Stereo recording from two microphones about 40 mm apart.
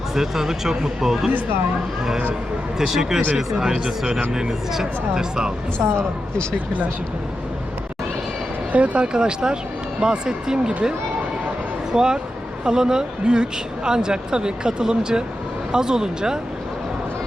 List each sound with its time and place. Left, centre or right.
0.1 s speech: centre
2.7 s speech: centre
5.8 s speech: right
8.7 s speech: right; by 10.8 s centre
11.9 s speech: centre